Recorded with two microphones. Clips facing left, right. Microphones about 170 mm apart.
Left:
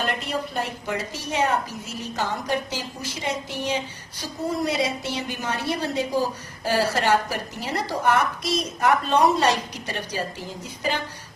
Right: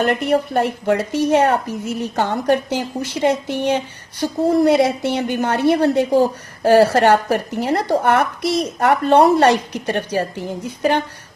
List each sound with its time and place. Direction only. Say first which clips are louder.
0.0 s a woman's voice: right 10 dB; 60° right (ahead or behind)